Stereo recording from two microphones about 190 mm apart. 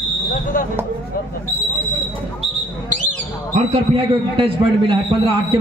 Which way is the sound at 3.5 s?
30° right (ahead or behind).